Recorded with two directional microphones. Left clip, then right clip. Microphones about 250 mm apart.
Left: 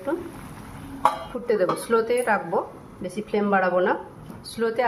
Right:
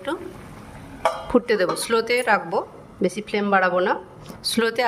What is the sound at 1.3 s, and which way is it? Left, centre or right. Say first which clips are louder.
A woman's voice: right 3 dB; right.